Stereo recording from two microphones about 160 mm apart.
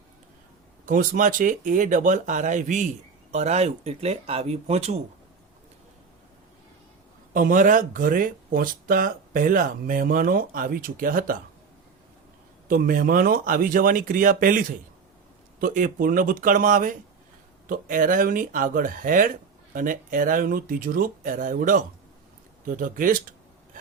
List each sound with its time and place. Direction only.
0.9 s speech: 55° right (ahead or behind)
7.3 s speech: 55° right (ahead or behind)
12.6 s speech: 60° right (ahead or behind)
15.6 s speech: 55° right (ahead or behind)